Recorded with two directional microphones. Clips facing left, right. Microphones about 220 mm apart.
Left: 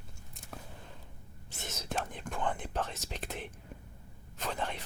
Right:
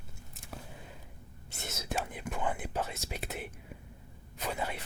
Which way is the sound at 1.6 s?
10° right (ahead or behind).